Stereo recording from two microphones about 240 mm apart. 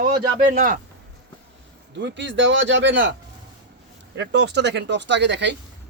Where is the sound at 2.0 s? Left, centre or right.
Right.